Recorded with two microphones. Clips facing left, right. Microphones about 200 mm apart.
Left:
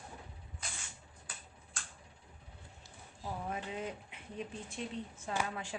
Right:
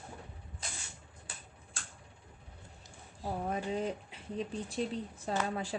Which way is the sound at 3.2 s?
35° right (ahead or behind).